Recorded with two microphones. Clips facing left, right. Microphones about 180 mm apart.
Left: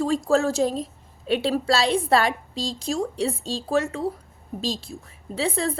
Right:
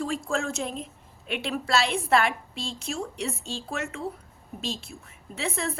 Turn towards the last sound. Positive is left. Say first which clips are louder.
# left 6 dB
turn(degrees=30)  # may be behind; listen again after turning